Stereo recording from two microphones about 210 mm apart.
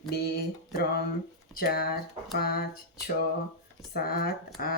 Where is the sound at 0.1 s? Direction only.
50° left (ahead or behind).